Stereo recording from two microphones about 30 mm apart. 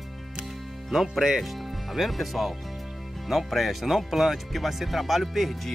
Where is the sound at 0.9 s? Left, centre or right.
Centre.